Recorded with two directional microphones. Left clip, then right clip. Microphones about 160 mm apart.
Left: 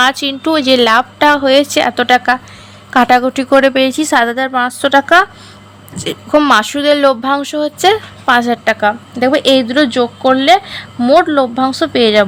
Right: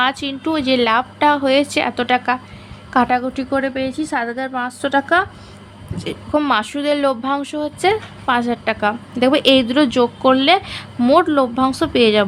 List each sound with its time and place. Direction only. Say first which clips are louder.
0.0 s a woman's voice: left 6 dB; 20° left (ahead or behind)